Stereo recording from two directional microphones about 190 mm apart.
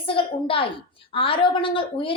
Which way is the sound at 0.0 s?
30° left (ahead or behind).